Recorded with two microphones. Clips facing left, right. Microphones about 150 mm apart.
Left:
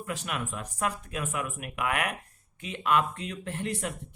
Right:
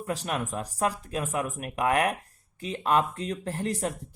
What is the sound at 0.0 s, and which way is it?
Speech, 35° right (ahead or behind).